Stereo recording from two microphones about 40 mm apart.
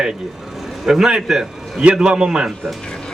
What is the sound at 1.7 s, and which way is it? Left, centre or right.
Speech, centre.